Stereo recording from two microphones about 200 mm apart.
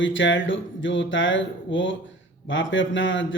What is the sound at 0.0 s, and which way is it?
A man's voice, 70° left (ahead or behind).